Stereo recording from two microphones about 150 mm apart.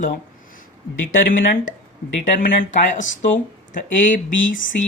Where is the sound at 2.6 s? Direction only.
60° left (ahead or behind).